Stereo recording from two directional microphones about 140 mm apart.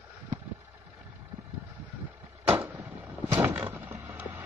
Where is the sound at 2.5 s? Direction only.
15° right (ahead or behind).